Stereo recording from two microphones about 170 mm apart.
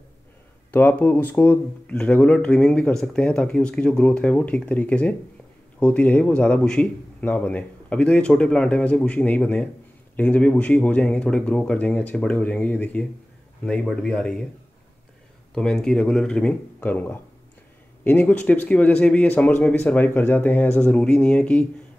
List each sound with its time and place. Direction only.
0.7 s speech: 10° left (ahead or behind)
15.5 s speech: 5° left (ahead or behind)